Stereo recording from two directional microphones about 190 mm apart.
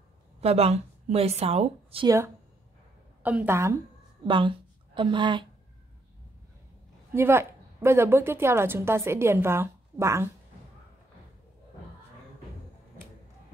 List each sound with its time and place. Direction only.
0.4 s speech: 30° right (ahead or behind)
2.0 s a woman's voice: 15° right (ahead or behind)
4.3 s a woman's voice: 25° right (ahead or behind)
7.2 s a woman's voice: 10° right (ahead or behind)